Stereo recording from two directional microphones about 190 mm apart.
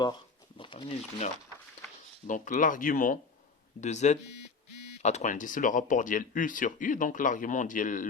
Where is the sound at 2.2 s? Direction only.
45° left (ahead or behind).